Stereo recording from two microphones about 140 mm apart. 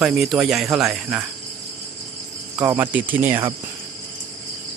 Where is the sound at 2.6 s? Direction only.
15° right (ahead or behind).